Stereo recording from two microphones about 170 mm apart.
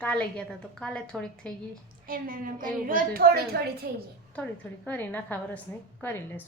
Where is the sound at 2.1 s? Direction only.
55° right (ahead or behind).